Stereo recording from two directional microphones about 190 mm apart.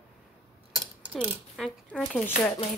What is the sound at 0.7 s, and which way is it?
Speech, 5° right (ahead or behind).